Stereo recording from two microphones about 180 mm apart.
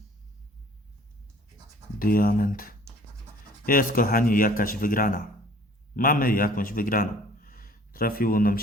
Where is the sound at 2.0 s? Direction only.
55° left (ahead or behind).